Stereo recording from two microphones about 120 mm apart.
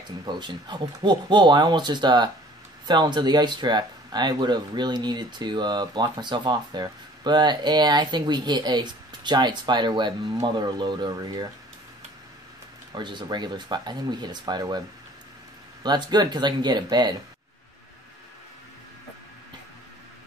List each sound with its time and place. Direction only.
0.2 s speech: 40° right (ahead or behind)
12.9 s speech: 40° right (ahead or behind)
15.8 s speech: 35° right (ahead or behind)